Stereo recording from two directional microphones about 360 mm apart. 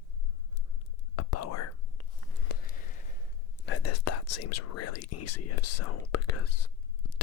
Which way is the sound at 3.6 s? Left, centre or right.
Left.